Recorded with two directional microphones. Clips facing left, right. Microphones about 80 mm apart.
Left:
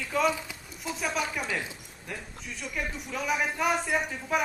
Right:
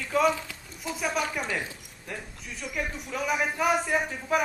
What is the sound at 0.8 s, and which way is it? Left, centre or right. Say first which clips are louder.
A woman's voice: right 2 dB; centre.